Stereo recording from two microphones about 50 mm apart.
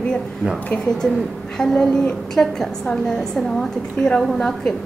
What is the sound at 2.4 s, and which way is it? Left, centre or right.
Speech, left.